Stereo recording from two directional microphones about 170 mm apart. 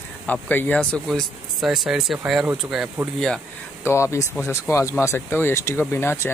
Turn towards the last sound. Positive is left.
turn(degrees=15)  # may be behind; listen again after turning